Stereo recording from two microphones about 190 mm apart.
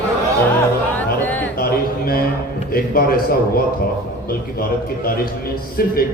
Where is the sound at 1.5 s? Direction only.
50° left (ahead or behind).